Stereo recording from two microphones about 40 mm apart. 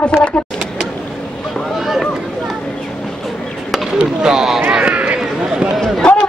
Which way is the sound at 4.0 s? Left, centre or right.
Centre.